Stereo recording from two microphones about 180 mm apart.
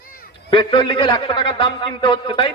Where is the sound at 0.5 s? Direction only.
25° left (ahead or behind).